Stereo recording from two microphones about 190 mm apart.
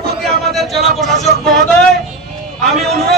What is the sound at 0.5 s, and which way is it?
Speech, centre (ahead or behind).